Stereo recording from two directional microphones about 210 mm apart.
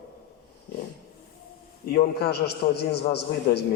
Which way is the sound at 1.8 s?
50° left (ahead or behind).